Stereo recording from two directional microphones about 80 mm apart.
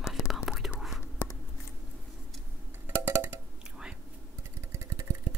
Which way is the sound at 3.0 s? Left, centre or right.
Right.